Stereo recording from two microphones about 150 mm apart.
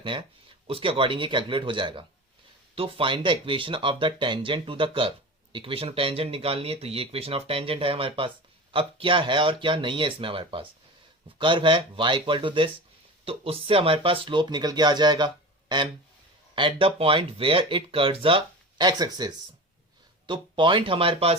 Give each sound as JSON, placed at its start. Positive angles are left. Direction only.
{"t": 0.0, "sound": "speech", "side_deg": -35}
{"t": 16.6, "sound": "speech", "side_deg": -35}